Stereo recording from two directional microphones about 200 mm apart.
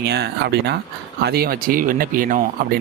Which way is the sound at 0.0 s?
55° right (ahead or behind).